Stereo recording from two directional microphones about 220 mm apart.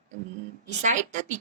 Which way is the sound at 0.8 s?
35° right (ahead or behind).